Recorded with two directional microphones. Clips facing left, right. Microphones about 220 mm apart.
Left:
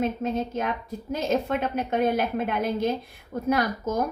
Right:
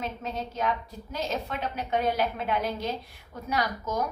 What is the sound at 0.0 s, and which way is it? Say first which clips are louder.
A woman's voice: left 8 dB; 50° left (ahead or behind).